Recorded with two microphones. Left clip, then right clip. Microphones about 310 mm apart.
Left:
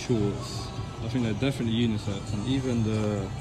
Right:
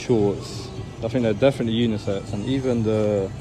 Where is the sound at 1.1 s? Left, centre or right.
Centre.